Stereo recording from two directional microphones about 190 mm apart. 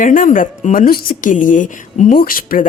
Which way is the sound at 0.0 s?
45° left (ahead or behind).